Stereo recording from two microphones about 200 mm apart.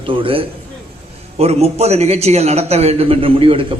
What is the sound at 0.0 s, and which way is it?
A man's voice, 25° right (ahead or behind).